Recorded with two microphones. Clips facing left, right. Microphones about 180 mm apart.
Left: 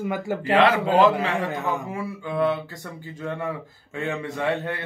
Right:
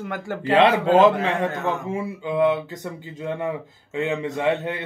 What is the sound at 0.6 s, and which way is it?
Speech, 25° right (ahead or behind).